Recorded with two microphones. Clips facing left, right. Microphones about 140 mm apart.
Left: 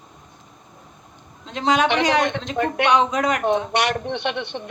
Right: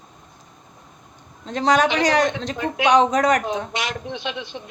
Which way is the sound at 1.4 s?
40° right (ahead or behind).